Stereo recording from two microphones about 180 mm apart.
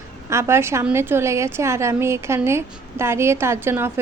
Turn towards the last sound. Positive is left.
turn(degrees=-15)  # may be behind; listen again after turning